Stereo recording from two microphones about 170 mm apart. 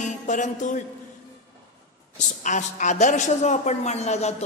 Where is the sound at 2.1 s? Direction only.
45° left (ahead or behind).